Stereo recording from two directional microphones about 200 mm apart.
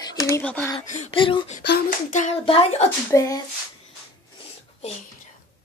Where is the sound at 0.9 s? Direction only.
30° left (ahead or behind).